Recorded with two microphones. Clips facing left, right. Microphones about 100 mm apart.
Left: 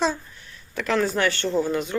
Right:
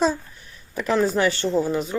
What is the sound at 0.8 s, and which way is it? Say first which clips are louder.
Speech: right 2 dB; 5° right (ahead or behind).